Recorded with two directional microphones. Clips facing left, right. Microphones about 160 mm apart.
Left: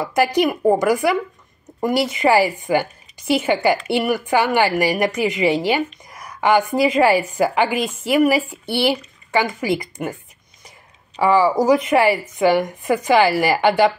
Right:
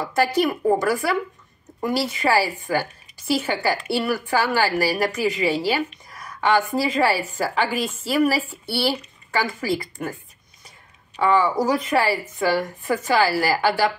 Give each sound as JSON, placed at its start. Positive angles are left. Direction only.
{"t": 0.1, "sound": "a woman's voice", "side_deg": 15}
{"t": 12.1, "sound": "a woman's voice", "side_deg": 15}